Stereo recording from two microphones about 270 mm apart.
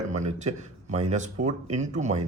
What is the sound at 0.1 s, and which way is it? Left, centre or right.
A man's voice, right.